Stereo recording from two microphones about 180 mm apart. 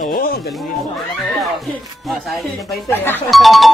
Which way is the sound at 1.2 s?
Centre (ahead or behind).